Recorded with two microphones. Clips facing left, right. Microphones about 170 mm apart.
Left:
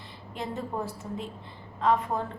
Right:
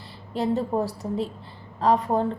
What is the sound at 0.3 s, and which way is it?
A woman's voice, 35° right (ahead or behind).